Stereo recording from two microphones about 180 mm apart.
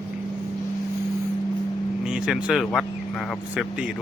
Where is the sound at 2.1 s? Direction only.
5° right (ahead or behind).